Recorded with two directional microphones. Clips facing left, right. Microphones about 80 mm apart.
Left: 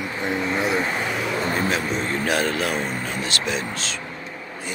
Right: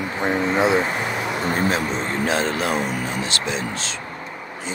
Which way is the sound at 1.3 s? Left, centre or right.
Right.